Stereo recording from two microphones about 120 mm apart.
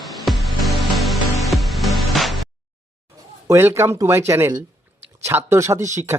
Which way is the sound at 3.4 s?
25° right (ahead or behind).